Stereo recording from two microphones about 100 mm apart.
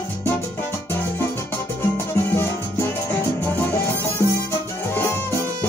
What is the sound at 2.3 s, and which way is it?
Music, 25° left (ahead or behind).